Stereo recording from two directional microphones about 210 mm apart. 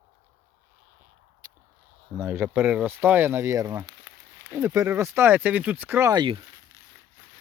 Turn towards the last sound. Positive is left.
turn(degrees=-20)  # may be behind; listen again after turning